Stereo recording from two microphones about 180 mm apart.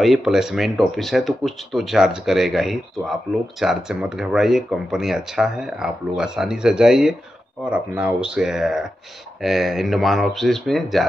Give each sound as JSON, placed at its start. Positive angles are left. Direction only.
{"t": 0.0, "sound": "speech", "side_deg": 0}